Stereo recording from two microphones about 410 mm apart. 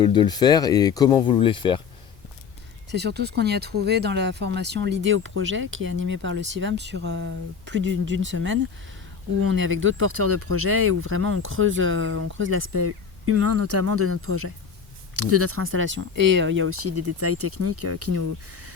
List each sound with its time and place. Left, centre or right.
0.0 s speech: centre
2.9 s speech: right